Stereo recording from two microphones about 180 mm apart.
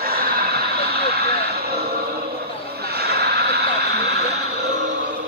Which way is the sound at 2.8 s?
60° right (ahead or behind).